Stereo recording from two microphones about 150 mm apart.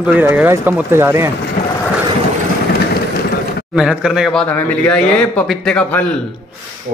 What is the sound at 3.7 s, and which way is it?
Speech, 5° right (ahead or behind).